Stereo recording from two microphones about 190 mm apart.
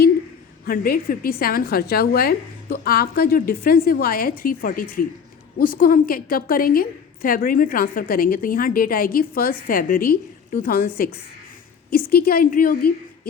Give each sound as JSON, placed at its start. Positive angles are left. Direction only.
{"t": 0.6, "sound": "a woman's voice", "side_deg": 50}